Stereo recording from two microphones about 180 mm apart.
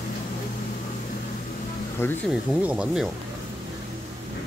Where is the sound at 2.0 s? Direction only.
10° left (ahead or behind).